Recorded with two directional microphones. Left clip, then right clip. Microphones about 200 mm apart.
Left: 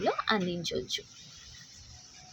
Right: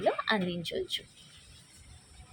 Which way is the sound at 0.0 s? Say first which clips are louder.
Even; 5° left (ahead or behind).